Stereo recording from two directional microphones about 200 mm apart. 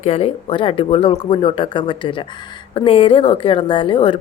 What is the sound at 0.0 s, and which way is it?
Speech, 30° left (ahead or behind).